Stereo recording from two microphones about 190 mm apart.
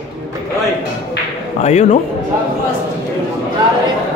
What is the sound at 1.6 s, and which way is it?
Speech, 35° left (ahead or behind).